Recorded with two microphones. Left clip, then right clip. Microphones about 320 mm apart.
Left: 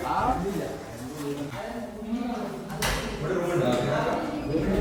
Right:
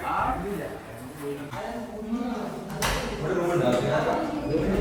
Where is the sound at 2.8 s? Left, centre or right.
Centre.